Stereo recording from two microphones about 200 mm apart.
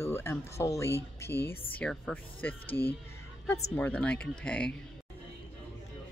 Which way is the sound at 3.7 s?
5° left (ahead or behind).